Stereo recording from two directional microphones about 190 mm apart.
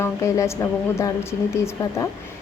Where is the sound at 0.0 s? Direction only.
15° left (ahead or behind).